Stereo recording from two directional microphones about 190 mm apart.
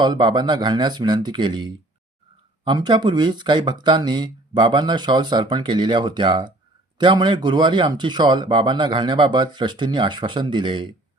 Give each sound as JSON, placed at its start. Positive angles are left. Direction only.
{"t": 0.0, "sound": "speech", "side_deg": -25}